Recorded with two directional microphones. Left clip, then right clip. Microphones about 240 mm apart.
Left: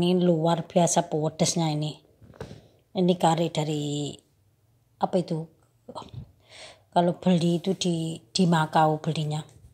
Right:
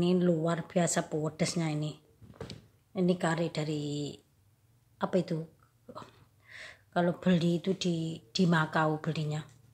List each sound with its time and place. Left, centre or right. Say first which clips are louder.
0.0 s speech: left 6 dB; centre
1.3 s speech: left 7 dB; centre
1.6 s speech: left 7 dB; centre